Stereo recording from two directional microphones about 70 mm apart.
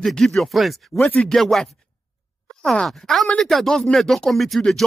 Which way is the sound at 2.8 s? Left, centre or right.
Centre.